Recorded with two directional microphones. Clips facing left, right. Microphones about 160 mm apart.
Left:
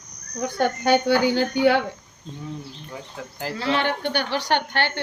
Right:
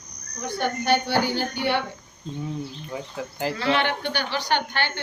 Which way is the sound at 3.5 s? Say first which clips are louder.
Left 1 dB; 40° left (ahead or behind).